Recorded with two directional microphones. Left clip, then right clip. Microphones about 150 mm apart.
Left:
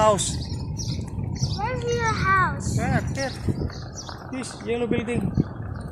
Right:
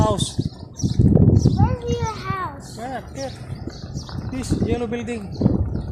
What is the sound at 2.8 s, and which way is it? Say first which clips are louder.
Speech: left 2 dB; 25° right (ahead or behind).